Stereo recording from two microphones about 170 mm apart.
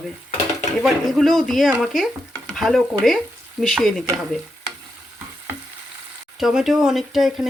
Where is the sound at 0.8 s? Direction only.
Centre (ahead or behind).